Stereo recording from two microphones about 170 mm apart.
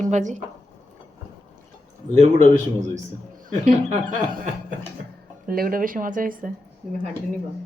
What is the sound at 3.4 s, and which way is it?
Speech, 45° right (ahead or behind).